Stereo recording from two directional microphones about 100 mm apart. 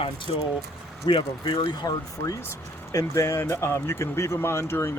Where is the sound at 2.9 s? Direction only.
30° left (ahead or behind).